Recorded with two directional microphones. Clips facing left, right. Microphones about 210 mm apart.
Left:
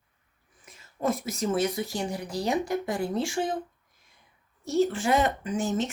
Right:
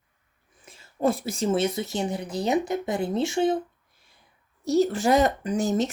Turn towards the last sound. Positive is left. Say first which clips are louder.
# right 4 dB
turn(degrees=-40)  # may be behind; listen again after turning